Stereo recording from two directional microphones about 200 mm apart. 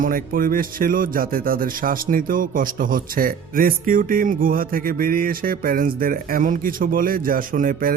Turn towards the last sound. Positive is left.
turn(degrees=-45)  # may be behind; listen again after turning